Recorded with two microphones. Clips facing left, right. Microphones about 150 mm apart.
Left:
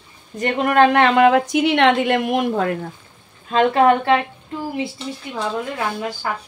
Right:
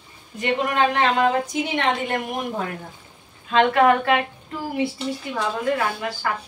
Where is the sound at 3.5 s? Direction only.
30° left (ahead or behind).